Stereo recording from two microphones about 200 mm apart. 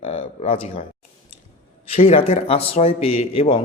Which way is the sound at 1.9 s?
30° left (ahead or behind).